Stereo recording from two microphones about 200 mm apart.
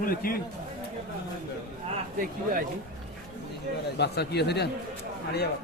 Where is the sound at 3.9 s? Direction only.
55° left (ahead or behind).